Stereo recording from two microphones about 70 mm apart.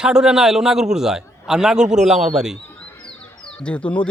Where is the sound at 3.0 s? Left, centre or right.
Centre.